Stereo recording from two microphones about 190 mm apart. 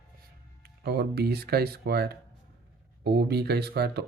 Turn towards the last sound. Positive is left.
turn(degrees=-60)  # may be behind; listen again after turning